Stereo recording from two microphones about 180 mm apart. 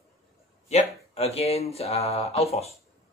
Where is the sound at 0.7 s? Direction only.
35° left (ahead or behind).